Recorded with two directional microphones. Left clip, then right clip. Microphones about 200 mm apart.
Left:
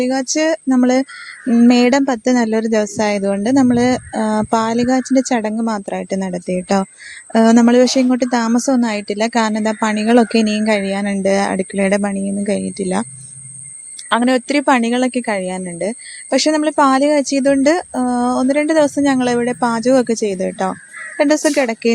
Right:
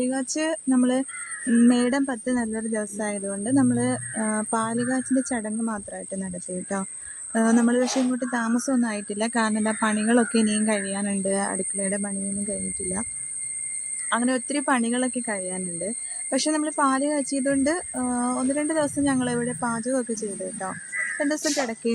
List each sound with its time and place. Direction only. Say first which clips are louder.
0.0 s a sound: left 10 dB; 25° left (ahead or behind)
1.6 s speech: left 11 dB; 35° left (ahead or behind)
14.1 s speech: left 10 dB; 35° left (ahead or behind)